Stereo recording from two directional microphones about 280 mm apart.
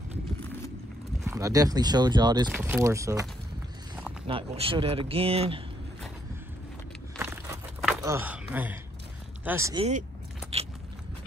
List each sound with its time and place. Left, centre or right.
1.2 s speech: centre
4.3 s speech: centre
7.2 s crumpling: centre
9.4 s speech: centre